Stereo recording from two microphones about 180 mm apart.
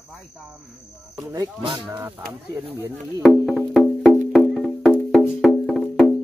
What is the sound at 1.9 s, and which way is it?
Speech, 10° right (ahead or behind).